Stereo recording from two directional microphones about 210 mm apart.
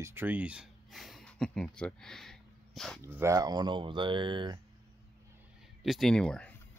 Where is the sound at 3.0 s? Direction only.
15° right (ahead or behind).